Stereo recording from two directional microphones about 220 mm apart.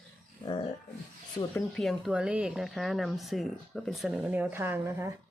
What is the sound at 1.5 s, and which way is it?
Speech, centre (ahead or behind).